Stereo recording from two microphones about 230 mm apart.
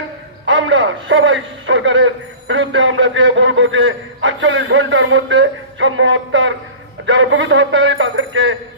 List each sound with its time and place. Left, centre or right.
0.5 s a man's voice: right